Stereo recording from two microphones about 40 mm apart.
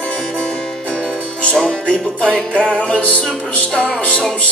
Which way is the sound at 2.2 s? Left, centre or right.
Left.